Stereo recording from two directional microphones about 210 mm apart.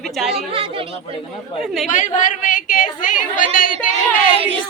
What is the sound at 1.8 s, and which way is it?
A woman's voice, 35° left (ahead or behind).